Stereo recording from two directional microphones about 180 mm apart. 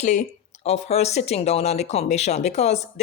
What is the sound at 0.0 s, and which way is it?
Speech, 40° left (ahead or behind).